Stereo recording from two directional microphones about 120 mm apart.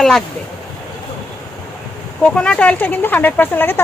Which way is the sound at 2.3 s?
10° left (ahead or behind).